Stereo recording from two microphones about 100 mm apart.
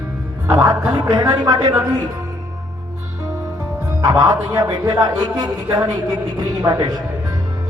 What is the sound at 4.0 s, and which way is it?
A man's voice, 40° right (ahead or behind).